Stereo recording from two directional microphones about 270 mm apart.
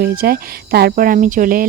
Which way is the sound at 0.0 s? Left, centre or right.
Right.